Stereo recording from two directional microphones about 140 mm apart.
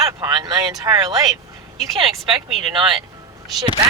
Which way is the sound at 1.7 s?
Centre (ahead or behind).